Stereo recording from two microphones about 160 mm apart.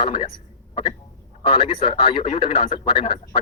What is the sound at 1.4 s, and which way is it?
Speech, 35° left (ahead or behind).